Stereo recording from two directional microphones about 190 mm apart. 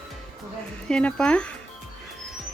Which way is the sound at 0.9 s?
5° left (ahead or behind).